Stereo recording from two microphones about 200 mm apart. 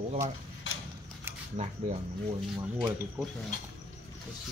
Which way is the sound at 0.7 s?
65° left (ahead or behind).